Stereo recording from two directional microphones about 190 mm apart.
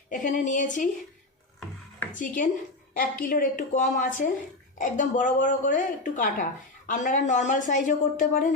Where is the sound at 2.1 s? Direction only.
45° left (ahead or behind).